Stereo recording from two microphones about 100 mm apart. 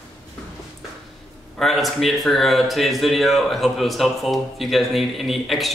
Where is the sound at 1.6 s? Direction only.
Centre (ahead or behind).